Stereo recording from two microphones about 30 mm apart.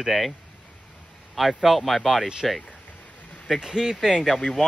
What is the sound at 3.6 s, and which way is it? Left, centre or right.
Speech, centre.